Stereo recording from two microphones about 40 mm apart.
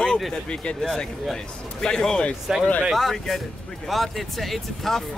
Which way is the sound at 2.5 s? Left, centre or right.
Centre.